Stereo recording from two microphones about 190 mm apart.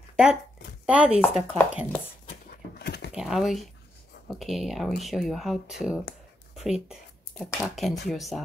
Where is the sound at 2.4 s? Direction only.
55° left (ahead or behind).